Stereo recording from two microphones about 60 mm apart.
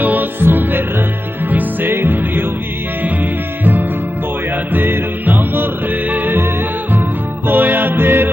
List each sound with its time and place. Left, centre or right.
0.0 s music: right
4.7 s music: right